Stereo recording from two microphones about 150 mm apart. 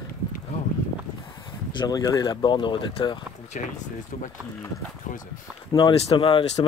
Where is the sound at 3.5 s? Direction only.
60° left (ahead or behind).